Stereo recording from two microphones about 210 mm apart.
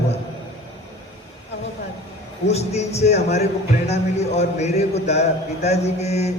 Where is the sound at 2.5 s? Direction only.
30° left (ahead or behind).